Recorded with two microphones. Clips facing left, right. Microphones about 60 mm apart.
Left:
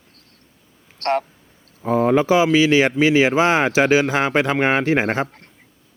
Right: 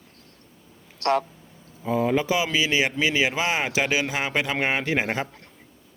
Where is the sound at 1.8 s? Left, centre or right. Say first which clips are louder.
Left 6 dB; left.